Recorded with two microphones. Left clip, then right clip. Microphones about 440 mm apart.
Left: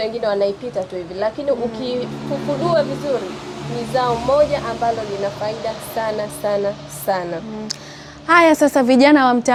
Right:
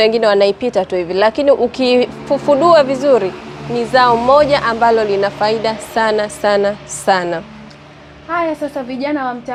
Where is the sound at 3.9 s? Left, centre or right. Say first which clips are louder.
Right 6 dB; right.